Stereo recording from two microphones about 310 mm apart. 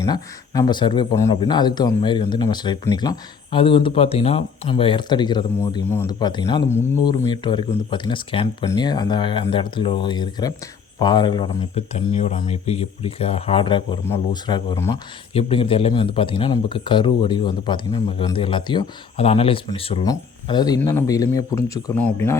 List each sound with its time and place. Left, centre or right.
0.0 s speech: centre